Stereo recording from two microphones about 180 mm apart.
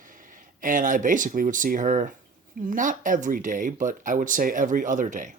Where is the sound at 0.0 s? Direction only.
50° right (ahead or behind).